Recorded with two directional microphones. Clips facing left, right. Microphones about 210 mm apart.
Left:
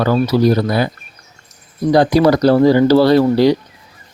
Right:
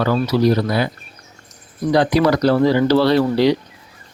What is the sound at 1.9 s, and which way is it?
Speech, 40° left (ahead or behind).